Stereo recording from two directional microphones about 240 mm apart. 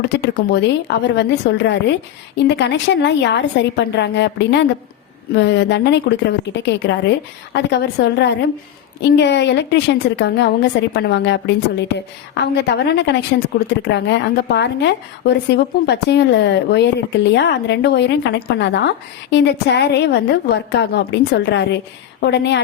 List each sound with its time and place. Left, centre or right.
0.1 s a woman's voice: left